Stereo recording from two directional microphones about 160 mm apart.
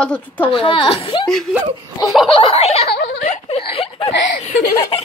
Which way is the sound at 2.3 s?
35° left (ahead or behind).